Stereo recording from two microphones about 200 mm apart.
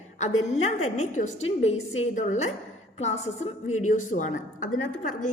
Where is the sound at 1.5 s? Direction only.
30° left (ahead or behind).